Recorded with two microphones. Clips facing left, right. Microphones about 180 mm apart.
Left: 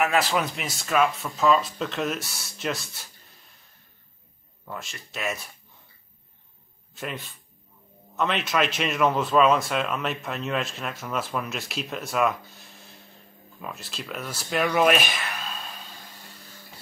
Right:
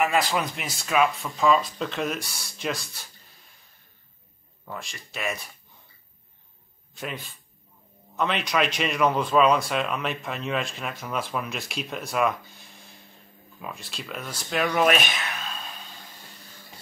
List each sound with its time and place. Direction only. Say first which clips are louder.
0.0 s speech: even; centre (ahead or behind)
4.6 s speech: even; centre (ahead or behind)
6.9 s a sound: even; centre (ahead or behind)
8.2 s speech: even; centre (ahead or behind)